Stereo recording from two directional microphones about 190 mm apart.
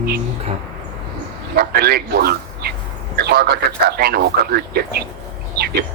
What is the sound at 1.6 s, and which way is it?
A man's voice, 55° right (ahead or behind).